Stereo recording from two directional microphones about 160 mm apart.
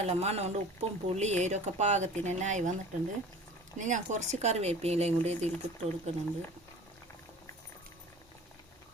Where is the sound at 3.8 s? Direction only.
50° right (ahead or behind).